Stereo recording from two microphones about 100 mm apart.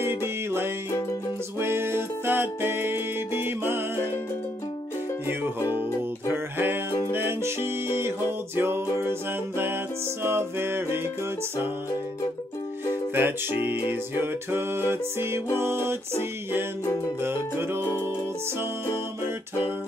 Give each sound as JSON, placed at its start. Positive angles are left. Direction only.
{"t": 0.0, "sound": "music", "side_deg": -25}
{"t": 6.3, "sound": "music", "side_deg": -20}
{"t": 10.2, "sound": "music", "side_deg": -25}
{"t": 13.1, "sound": "music", "side_deg": -20}
{"t": 17.2, "sound": "music", "side_deg": -25}